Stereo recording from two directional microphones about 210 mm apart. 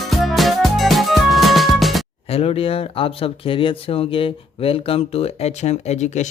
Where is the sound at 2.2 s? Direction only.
30° left (ahead or behind).